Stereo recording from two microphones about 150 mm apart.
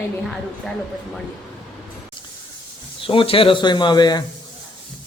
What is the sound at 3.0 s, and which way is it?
Speech, 35° left (ahead or behind).